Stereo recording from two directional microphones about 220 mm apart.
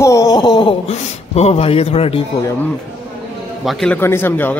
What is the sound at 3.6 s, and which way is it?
Speech, 5° left (ahead or behind).